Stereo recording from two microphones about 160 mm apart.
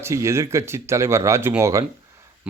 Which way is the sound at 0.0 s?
20° right (ahead or behind).